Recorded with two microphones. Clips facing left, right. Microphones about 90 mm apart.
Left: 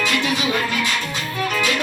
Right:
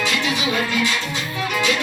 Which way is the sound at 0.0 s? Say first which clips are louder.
Left 1 dB; 20° right (ahead or behind).